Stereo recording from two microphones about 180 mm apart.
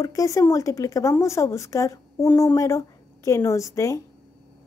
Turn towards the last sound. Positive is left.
turn(degrees=15)  # may be behind; listen again after turning